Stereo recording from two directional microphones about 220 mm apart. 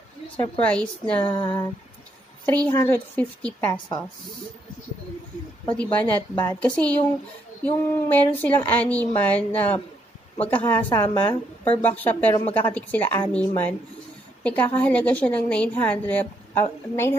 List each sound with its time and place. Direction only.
0.6 s a woman's voice: 5° left (ahead or behind)
1.4 s a sound: 20° left (ahead or behind)
2.4 s a woman's voice: 10° left (ahead or behind)
5.7 s a woman's voice: 5° left (ahead or behind)